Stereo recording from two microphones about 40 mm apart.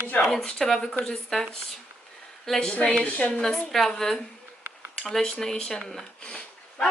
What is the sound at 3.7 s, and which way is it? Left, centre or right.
Speech, centre.